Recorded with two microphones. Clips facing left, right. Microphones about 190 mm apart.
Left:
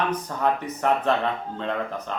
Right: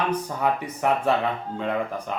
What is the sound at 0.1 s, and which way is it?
Speech, 10° right (ahead or behind).